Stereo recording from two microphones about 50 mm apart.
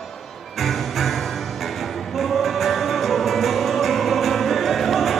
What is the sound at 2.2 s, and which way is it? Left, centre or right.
Music, centre.